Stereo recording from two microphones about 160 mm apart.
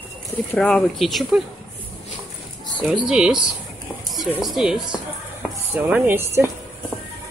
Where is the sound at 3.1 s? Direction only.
5° right (ahead or behind).